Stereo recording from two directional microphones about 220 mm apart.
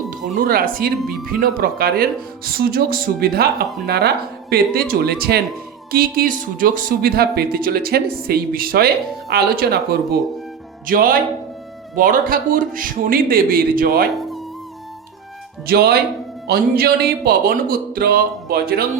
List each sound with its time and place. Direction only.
0.1 s speech: 40° right (ahead or behind)
15.6 s speech: 45° right (ahead or behind)